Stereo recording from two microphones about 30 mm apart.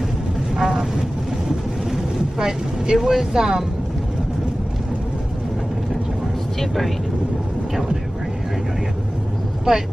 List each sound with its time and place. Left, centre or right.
0.6 s vehicle: right
1.9 s vehicle: right
3.1 s speech: centre
6.6 s speech: centre
9.7 s speech: right